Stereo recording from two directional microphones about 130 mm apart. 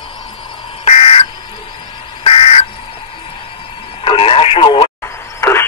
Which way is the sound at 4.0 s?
45° left (ahead or behind).